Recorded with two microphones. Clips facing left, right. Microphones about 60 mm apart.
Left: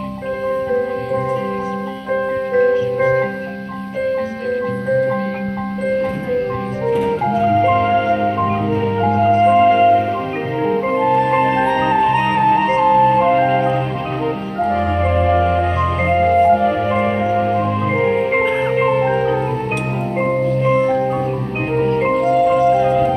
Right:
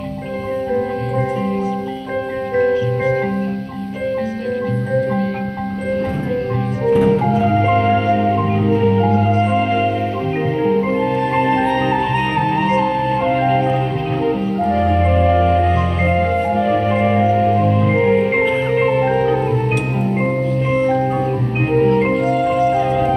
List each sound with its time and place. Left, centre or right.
7.4 s music: centre
8.9 s music: centre
12.9 s music: centre
17.9 s music: centre
22.6 s music: centre